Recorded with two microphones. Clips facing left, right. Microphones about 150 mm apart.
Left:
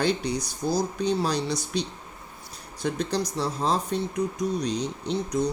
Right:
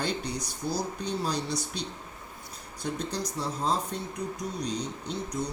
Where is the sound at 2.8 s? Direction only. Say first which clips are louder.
Left 6 dB; 80° left.